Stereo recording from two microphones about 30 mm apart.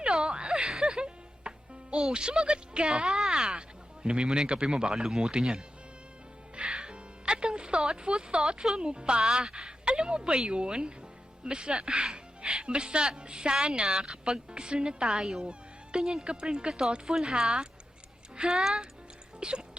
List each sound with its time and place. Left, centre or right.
0.0 s a sound: right
0.7 s music: right
2.1 s speech: right
3.1 s speech: centre
6.6 s music: right
8.7 s speech: right
17.2 s speech: centre
19.4 s speech: right